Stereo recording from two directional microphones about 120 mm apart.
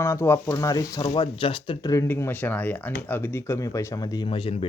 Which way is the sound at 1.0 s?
45° left (ahead or behind).